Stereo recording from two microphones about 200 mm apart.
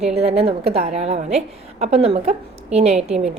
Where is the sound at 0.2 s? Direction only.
30° right (ahead or behind).